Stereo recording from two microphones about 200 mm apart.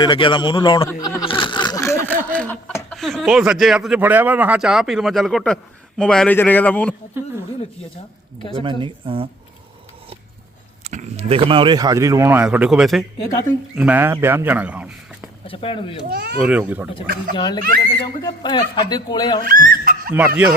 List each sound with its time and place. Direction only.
0.0 s speech: 25° left (ahead or behind); by 6.9 s 10° left (ahead or behind)
8.5 s speech: 25° right (ahead or behind)
10.8 s speech: 35° right (ahead or behind); by 14.8 s 5° right (ahead or behind)
15.4 s speech: 25° left (ahead or behind)
16.0 s a child's voice: 55° right (ahead or behind)
16.5 s speech: 5° right (ahead or behind)
17.3 s speech: 20° left (ahead or behind)
19.6 s snicker: 45° right (ahead or behind)
20.1 s speech: 10° right (ahead or behind)